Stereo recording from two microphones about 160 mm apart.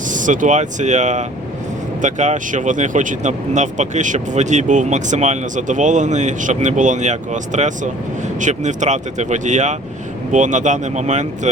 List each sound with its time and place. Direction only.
0.1 s speech: 55° right (ahead or behind)